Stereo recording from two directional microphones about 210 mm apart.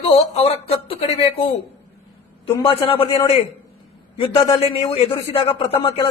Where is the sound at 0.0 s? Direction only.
30° left (ahead or behind).